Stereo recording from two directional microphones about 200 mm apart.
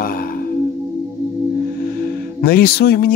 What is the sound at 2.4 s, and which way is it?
Music, 50° left (ahead or behind).